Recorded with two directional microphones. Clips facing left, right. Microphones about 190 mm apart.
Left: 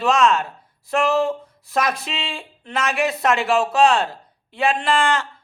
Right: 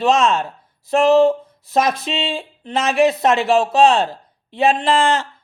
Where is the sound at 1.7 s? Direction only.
25° right (ahead or behind).